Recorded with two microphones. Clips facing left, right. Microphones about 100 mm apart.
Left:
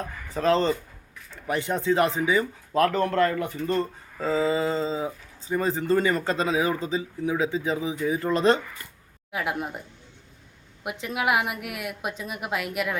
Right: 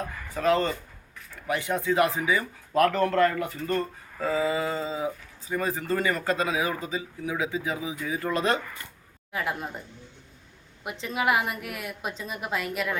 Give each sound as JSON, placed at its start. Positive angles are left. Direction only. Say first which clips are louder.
{"t": 0.0, "sound": "speech", "louder": "even", "side_deg": 0}
{"t": 0.3, "sound": "speech", "louder": "left 2 dB", "side_deg": 25}
{"t": 9.3, "sound": "a woman's voice", "louder": "left 2 dB", "side_deg": 10}
{"t": 11.0, "sound": "a woman's voice", "louder": "even", "side_deg": 5}